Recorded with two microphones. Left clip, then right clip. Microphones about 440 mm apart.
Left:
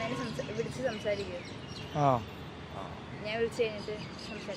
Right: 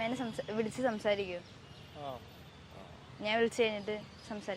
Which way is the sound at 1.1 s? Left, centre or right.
Right.